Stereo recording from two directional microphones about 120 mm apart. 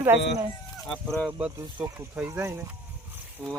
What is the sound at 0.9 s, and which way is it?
Speech, 5° left (ahead or behind).